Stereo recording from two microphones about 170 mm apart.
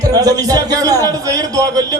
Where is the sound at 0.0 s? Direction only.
20° right (ahead or behind).